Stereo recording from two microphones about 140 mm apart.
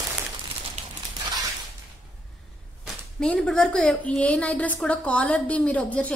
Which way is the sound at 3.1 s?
5° left (ahead or behind).